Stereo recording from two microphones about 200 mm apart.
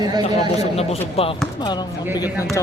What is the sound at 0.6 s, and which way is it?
Speech, 30° left (ahead or behind).